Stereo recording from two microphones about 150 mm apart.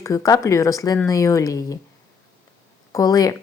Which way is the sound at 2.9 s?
25° left (ahead or behind).